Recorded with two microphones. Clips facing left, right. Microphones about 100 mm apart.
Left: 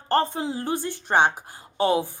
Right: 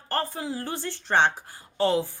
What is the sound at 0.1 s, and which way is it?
A woman's voice, 20° left (ahead or behind).